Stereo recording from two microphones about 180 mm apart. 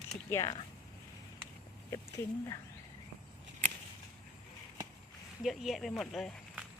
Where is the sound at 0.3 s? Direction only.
15° left (ahead or behind).